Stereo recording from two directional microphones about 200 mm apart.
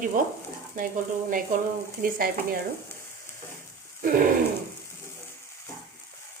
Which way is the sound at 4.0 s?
45° right (ahead or behind).